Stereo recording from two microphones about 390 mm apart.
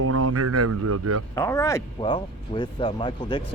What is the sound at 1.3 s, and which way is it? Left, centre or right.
Speech, centre.